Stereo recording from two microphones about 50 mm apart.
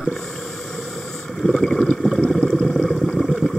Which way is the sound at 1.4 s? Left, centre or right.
Centre.